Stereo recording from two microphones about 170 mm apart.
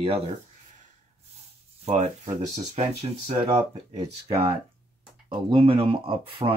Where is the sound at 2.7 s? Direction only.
40° right (ahead or behind).